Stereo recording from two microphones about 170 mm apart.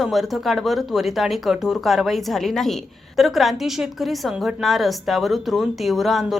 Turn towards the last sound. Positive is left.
turn(degrees=0)  # may be behind; listen again after turning